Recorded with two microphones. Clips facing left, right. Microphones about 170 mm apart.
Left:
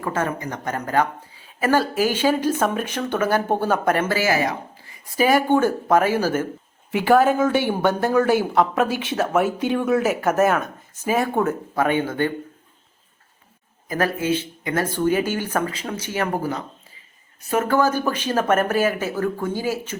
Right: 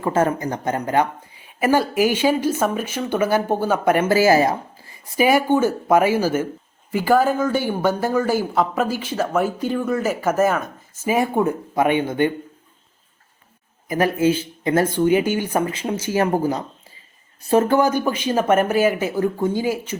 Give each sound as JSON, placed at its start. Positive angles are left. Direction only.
{"t": 0.0, "sound": "speech", "side_deg": -30}
{"t": 0.6, "sound": "speech", "side_deg": -20}
{"t": 1.5, "sound": "speech", "side_deg": -10}
{"t": 4.1, "sound": "speech", "side_deg": -35}
{"t": 5.0, "sound": "speech", "side_deg": -15}
{"t": 6.9, "sound": "speech", "side_deg": 0}
{"t": 11.0, "sound": "speech", "side_deg": -10}
{"t": 13.8, "sound": "speech", "side_deg": -15}
{"t": 14.3, "sound": "speech", "side_deg": -30}
{"t": 15.0, "sound": "speech", "side_deg": -15}
{"t": 15.8, "sound": "speech", "side_deg": -25}
{"t": 17.7, "sound": "speech", "side_deg": -15}